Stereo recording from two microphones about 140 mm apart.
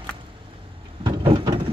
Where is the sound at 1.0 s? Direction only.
35° right (ahead or behind).